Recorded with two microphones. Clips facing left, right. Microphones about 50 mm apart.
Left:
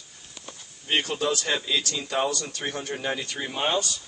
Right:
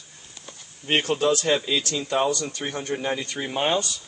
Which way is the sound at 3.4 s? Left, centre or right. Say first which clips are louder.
Right 3 dB; centre.